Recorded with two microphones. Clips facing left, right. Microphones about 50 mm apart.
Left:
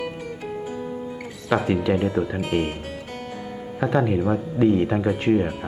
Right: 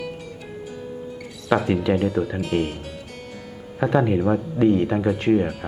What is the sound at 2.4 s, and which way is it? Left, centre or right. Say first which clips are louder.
Speech: even; left.